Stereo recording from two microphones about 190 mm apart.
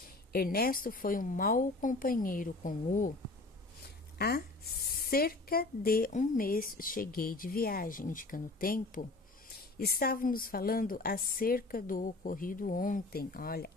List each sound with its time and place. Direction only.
0.3 s a woman's voice: 50° left (ahead or behind)
4.2 s a woman's voice: 55° left (ahead or behind)